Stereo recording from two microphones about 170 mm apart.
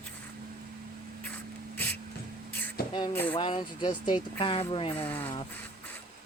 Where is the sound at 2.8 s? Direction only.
65° left (ahead or behind).